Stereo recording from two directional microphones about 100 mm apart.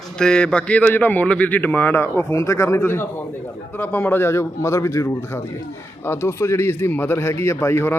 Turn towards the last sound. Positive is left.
turn(degrees=25)  # may be behind; listen again after turning